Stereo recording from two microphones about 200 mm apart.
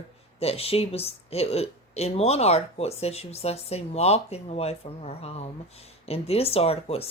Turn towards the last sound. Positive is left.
turn(degrees=30)  # may be behind; listen again after turning